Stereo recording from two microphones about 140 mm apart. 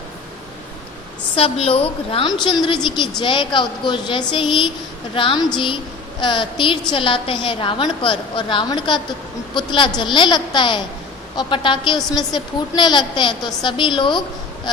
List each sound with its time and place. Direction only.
1.4 s a woman's voice: 45° left (ahead or behind)